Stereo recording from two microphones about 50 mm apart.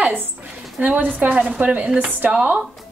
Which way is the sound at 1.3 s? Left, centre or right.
Centre.